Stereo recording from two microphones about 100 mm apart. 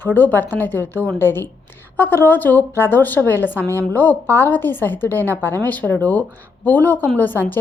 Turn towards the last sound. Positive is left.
turn(degrees=20)  # may be behind; listen again after turning